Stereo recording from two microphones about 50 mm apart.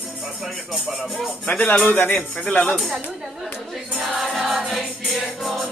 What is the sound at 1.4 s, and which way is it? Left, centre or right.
Speech, left.